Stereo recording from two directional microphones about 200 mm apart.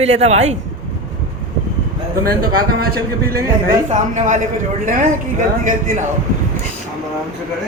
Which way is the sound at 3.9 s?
40° right (ahead or behind).